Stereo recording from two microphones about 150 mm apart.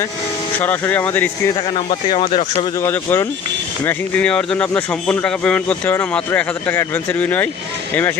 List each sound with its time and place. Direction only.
0.6 s speech: 10° left (ahead or behind)
1.7 s speech: 40° left (ahead or behind)
2.8 s speech: 15° left (ahead or behind)